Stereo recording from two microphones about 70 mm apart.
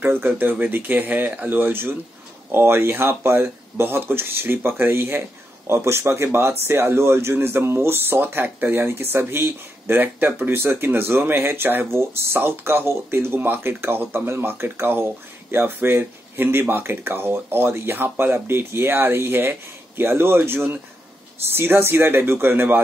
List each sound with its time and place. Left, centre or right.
0.0 s speech: right